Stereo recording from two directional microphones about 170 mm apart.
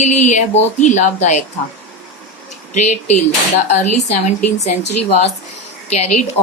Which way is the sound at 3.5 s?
45° left (ahead or behind).